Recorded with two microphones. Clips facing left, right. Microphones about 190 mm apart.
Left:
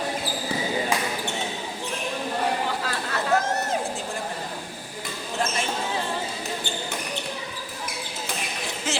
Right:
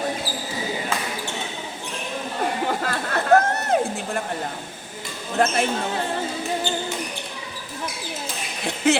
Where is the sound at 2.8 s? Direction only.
55° right (ahead or behind).